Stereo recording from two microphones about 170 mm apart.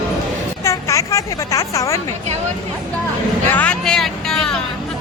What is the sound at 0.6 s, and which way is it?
Speech, 20° left (ahead or behind).